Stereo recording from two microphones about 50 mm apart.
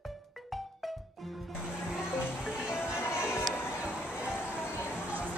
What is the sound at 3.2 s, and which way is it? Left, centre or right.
Music, left.